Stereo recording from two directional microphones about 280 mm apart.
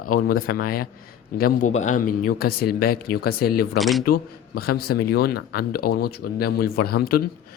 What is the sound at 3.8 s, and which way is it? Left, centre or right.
Speech, centre.